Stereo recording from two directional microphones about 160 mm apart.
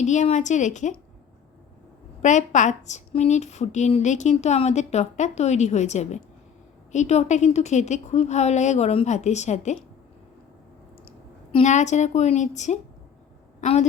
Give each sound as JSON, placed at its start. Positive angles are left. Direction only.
{"t": 0.0, "sound": "a woman's voice", "side_deg": 50}
{"t": 2.2, "sound": "a woman's voice", "side_deg": 50}
{"t": 11.6, "sound": "a woman's voice", "side_deg": 45}